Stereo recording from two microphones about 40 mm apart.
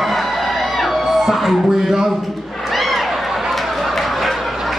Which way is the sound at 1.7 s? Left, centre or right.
Centre.